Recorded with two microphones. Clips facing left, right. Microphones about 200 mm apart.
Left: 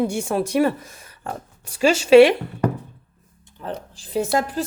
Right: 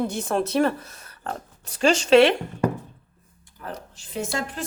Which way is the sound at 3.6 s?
30° left (ahead or behind).